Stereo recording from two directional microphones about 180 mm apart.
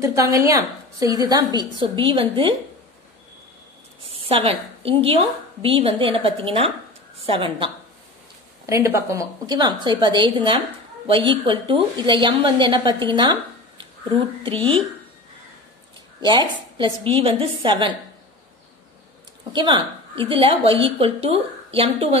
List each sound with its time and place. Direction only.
0.0 s a woman's voice: 15° right (ahead or behind)
4.3 s a woman's voice: 30° right (ahead or behind)
8.6 s a woman's voice: 15° right (ahead or behind)
16.3 s a woman's voice: 25° right (ahead or behind)
19.5 s a woman's voice: 25° right (ahead or behind)